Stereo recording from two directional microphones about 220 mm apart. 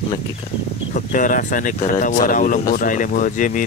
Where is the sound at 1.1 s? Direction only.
35° left (ahead or behind).